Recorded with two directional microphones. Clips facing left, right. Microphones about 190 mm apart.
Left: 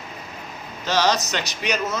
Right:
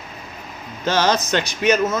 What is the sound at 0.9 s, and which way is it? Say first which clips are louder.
A man's voice: right 3 dB; 50° right (ahead or behind).